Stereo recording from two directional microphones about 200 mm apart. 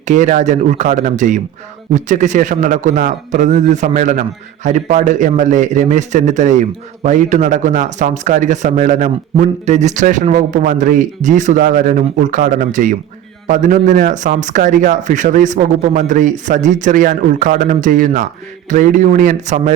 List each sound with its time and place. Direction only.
0.0 s a man's voice: 35° right (ahead or behind)